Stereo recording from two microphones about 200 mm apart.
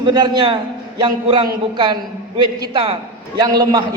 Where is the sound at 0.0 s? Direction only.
20° right (ahead or behind).